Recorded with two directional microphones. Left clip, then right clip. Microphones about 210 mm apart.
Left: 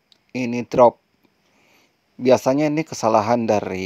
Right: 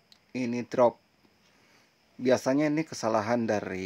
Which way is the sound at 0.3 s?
30° left (ahead or behind).